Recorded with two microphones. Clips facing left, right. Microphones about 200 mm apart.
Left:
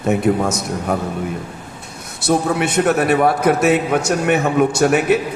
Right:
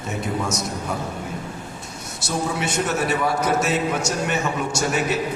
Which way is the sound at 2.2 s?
60° left (ahead or behind).